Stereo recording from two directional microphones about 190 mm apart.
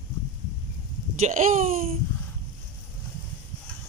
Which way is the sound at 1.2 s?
45° right (ahead or behind).